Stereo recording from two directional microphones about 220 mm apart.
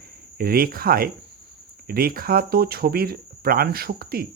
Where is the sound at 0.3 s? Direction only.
40° right (ahead or behind).